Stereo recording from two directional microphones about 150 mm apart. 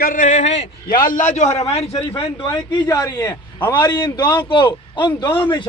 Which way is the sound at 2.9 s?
25° left (ahead or behind).